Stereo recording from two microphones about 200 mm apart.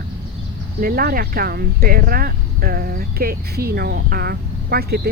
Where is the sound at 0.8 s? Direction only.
45° right (ahead or behind).